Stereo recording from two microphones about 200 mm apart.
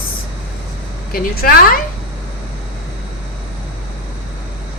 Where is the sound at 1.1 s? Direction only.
50° left (ahead or behind).